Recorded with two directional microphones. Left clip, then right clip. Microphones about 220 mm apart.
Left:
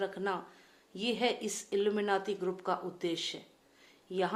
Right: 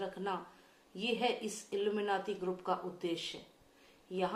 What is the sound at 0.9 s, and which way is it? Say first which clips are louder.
A woman's voice: left 2 dB; 40° left (ahead or behind).